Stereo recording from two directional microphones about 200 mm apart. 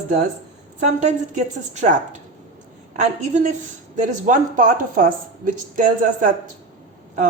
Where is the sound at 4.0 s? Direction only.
40° right (ahead or behind).